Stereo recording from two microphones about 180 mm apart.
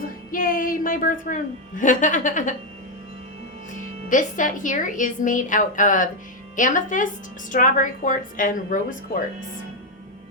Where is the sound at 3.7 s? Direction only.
45° left (ahead or behind).